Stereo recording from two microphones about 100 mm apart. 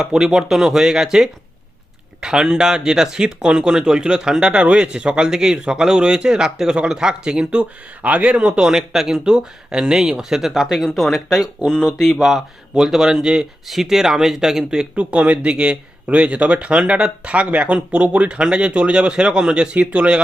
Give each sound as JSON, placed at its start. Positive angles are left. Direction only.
{"t": 0.0, "sound": "speech", "side_deg": -5}